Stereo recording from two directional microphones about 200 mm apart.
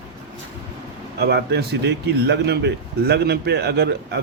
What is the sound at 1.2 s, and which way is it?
Speech, 55° right (ahead or behind).